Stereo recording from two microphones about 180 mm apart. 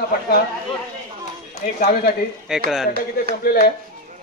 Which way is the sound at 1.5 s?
45° left (ahead or behind).